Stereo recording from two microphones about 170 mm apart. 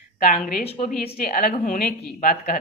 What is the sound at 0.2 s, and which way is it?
A woman's voice, 55° left (ahead or behind).